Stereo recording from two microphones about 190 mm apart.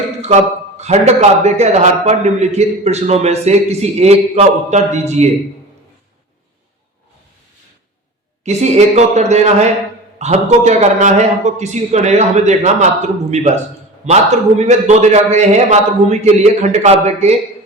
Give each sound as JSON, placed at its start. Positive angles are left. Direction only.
{"t": 0.8, "sound": "a man's voice", "side_deg": -35}
{"t": 8.4, "sound": "a man's voice", "side_deg": -35}